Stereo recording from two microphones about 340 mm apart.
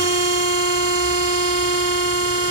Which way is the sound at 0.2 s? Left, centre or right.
Left.